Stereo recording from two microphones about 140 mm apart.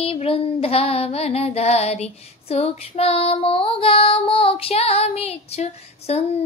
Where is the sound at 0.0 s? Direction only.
45° left (ahead or behind).